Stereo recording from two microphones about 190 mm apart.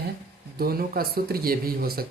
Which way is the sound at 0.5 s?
50° right (ahead or behind).